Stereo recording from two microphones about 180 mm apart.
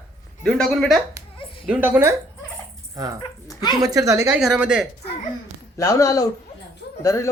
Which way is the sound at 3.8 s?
20° right (ahead or behind).